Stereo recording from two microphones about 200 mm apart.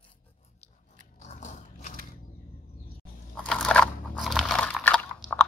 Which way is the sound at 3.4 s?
5° left (ahead or behind).